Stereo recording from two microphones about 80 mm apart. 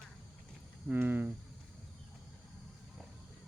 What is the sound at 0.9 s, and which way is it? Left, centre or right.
Speech, right.